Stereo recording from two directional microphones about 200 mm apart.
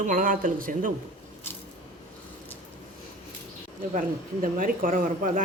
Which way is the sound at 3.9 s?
40° right (ahead or behind).